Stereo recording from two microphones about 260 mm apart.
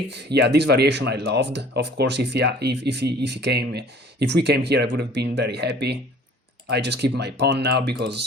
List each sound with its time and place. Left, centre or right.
0.1 s speech: right